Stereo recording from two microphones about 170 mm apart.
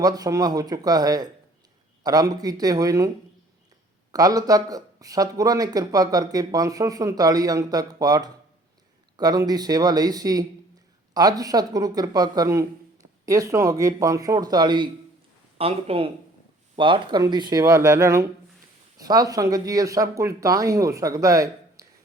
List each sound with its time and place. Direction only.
0.0 s speech: 20° right (ahead or behind)
4.1 s speech: 20° right (ahead or behind)